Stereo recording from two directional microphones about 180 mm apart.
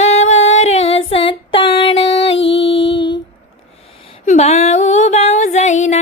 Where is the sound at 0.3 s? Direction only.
90° left.